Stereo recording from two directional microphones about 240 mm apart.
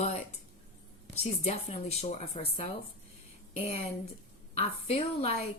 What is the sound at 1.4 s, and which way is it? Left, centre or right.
Speech, left.